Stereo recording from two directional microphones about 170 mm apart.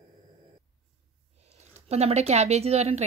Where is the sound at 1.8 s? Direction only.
40° right (ahead or behind).